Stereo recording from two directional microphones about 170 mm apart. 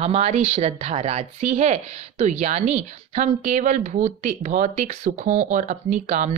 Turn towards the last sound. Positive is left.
turn(degrees=-45)  # may be behind; listen again after turning